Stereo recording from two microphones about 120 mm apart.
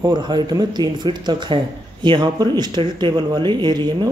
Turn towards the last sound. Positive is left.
turn(degrees=-35)  # may be behind; listen again after turning